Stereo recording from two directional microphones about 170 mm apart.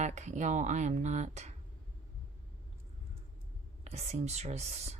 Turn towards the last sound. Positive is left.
turn(degrees=-40)  # may be behind; listen again after turning